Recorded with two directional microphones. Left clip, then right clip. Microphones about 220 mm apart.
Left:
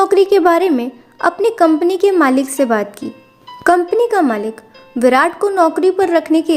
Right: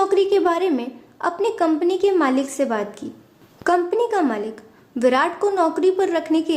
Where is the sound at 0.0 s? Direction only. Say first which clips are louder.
Left 7 dB; 30° left (ahead or behind).